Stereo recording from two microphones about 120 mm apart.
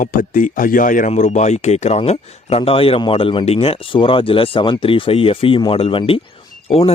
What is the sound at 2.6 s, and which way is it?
Speech, 50° left (ahead or behind).